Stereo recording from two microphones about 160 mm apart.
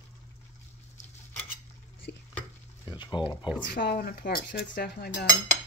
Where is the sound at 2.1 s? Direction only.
90° left.